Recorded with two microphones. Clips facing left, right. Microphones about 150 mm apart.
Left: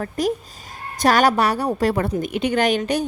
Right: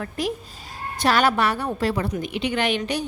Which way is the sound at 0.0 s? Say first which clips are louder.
Left 5 dB; 40° left (ahead or behind).